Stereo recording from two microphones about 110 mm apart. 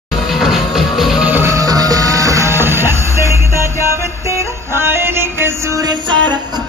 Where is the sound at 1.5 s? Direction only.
35° right (ahead or behind).